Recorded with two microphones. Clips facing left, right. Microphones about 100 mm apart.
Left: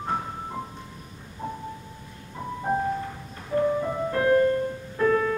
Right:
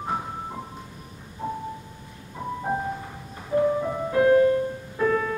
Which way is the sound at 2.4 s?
10° right (ahead or behind).